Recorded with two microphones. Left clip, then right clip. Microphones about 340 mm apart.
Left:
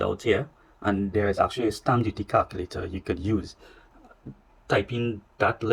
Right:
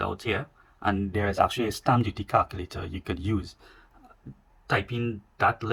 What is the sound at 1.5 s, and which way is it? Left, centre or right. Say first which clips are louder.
Speech: even; right.